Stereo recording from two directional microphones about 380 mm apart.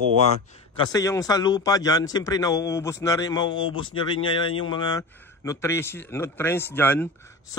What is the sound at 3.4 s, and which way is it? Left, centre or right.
Speech, left.